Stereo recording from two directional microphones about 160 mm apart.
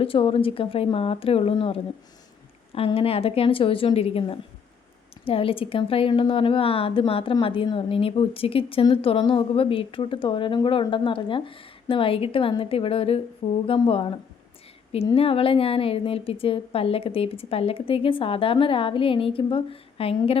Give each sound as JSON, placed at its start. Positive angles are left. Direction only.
{"t": 0.0, "sound": "a woman's voice", "side_deg": 35}